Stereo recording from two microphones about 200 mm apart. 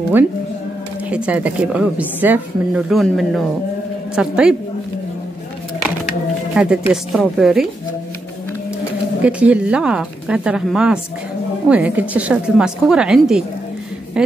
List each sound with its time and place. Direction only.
1.1 s a woman's voice: 5° right (ahead or behind)
6.5 s a woman's voice: 5° right (ahead or behind)
9.2 s a woman's voice: 5° right (ahead or behind)